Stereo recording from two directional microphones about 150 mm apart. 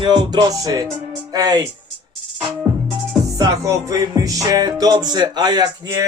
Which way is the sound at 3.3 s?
20° right (ahead or behind).